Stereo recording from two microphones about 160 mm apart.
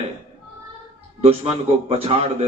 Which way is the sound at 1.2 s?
40° right (ahead or behind).